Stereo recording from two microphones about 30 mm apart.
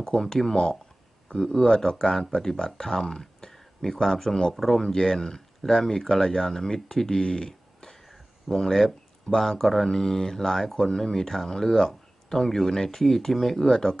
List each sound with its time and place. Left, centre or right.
0.2 s speech: centre
4.8 s speech: centre
7.2 s a sound: left
8.1 s speech: centre